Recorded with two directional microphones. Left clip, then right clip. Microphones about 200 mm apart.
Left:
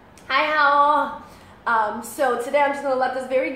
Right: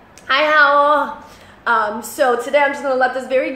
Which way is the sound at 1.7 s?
15° right (ahead or behind).